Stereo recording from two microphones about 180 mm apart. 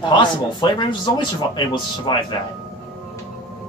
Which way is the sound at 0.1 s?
25° left (ahead or behind).